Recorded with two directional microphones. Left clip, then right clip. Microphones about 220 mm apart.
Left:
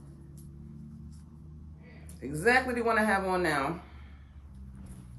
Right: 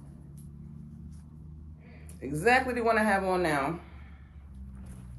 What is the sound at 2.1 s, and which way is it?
Speech, 10° left (ahead or behind).